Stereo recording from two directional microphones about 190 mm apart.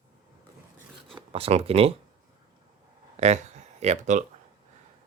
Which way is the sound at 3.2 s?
35° right (ahead or behind).